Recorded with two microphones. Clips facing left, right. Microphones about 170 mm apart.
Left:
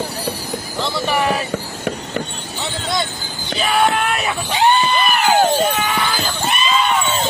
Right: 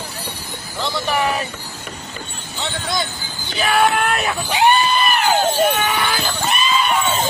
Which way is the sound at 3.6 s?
Centre (ahead or behind).